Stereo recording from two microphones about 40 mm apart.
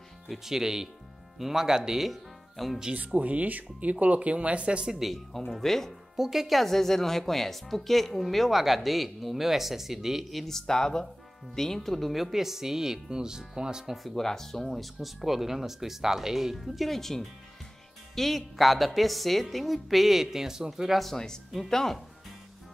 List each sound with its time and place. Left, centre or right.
0.3 s speech: centre
2.9 s speech: right
4.9 s speech: centre
5.6 s speech: centre
6.1 s speech: centre
10.4 s speech: centre
14.1 s speech: centre
21.0 s speech: centre